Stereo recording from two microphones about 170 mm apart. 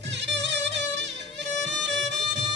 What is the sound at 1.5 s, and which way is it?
Music, 90° right.